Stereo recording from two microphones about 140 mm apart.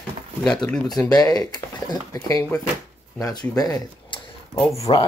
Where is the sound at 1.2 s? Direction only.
30° left (ahead or behind).